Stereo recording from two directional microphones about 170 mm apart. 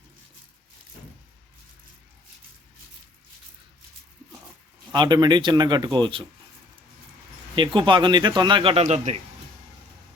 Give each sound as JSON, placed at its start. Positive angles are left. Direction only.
{"t": 4.9, "sound": "speech", "side_deg": -25}
{"t": 7.5, "sound": "speech", "side_deg": -30}